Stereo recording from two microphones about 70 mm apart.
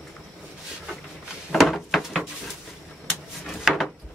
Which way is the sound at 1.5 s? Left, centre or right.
Centre.